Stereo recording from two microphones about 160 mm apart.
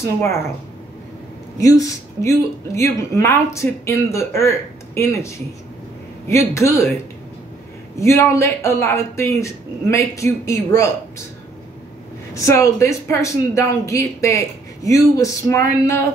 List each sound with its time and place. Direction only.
0.0 s speech: 15° left (ahead or behind)
1.6 s speech: 20° left (ahead or behind)
8.0 s speech: 15° left (ahead or behind)
12.4 s speech: 20° left (ahead or behind)